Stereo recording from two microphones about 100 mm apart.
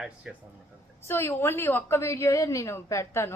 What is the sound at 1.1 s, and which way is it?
A woman's voice, 25° left (ahead or behind).